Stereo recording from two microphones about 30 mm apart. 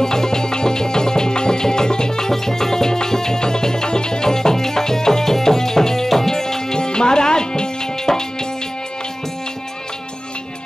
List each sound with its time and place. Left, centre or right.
0.0 s music: centre